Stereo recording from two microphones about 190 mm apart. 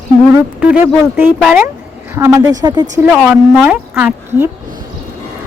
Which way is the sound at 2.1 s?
15° right (ahead or behind).